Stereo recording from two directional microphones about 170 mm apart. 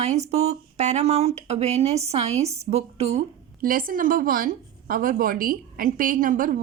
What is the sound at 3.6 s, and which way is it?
A woman's voice, 55° right (ahead or behind).